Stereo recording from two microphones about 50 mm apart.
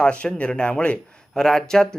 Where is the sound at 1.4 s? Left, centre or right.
Centre.